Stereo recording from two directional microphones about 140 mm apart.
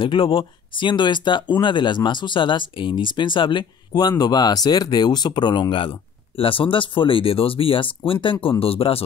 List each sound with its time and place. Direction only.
0.0 s speech: 40° left (ahead or behind)